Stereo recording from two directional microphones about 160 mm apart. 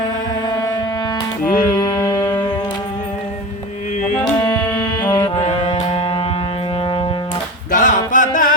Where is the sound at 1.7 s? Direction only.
25° left (ahead or behind).